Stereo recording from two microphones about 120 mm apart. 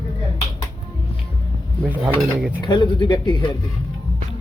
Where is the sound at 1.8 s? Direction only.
15° right (ahead or behind).